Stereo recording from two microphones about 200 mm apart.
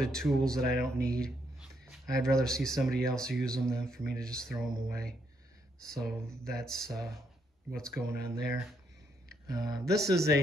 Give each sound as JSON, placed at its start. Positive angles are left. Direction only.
{"t": 0.0, "sound": "speech", "side_deg": 0}
{"t": 1.0, "sound": "a sound", "side_deg": 5}
{"t": 1.9, "sound": "speech", "side_deg": 0}
{"t": 7.9, "sound": "speech", "side_deg": -10}
{"t": 9.8, "sound": "speech", "side_deg": 0}